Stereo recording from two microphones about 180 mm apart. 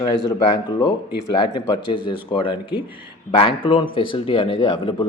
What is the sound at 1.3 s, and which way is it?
A man's voice, 25° left (ahead or behind).